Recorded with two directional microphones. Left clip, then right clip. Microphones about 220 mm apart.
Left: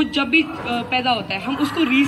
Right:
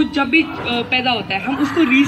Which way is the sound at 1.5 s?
15° left (ahead or behind).